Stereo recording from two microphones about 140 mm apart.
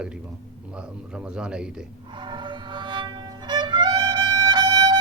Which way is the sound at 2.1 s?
35° right (ahead or behind).